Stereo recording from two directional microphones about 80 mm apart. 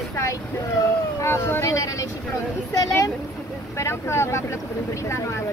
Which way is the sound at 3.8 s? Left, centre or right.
Left.